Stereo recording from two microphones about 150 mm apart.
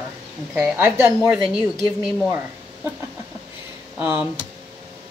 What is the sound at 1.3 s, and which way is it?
Speech, 5° right (ahead or behind).